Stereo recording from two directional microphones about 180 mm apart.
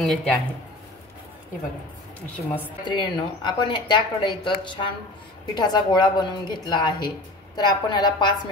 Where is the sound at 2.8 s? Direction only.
25° left (ahead or behind).